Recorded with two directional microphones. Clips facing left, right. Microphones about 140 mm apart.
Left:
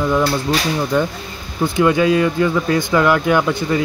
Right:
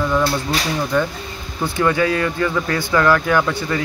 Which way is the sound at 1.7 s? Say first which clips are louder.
Left 4 dB; 15° left (ahead or behind).